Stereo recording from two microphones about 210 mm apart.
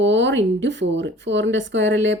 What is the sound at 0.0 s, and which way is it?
A woman's voice, 60° right (ahead or behind).